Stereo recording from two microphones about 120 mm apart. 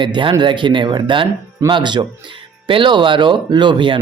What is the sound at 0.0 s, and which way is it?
A man's voice, 40° right (ahead or behind).